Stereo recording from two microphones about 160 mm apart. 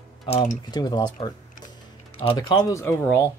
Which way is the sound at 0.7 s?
25° left (ahead or behind).